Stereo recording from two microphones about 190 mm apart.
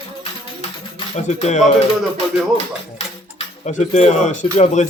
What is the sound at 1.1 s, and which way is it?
Speech, 35° left (ahead or behind).